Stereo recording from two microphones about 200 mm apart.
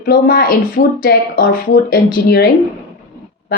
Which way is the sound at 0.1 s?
50° left (ahead or behind).